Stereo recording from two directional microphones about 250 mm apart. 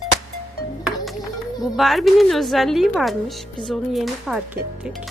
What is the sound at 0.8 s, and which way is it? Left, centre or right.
Music, centre.